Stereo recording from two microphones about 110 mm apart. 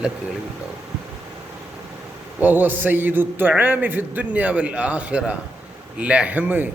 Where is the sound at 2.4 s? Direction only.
15° right (ahead or behind).